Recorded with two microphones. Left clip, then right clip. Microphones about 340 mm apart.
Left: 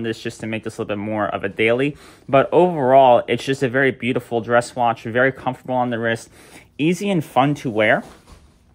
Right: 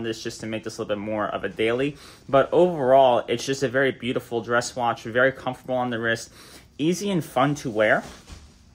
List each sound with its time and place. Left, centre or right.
0.0 s speech: centre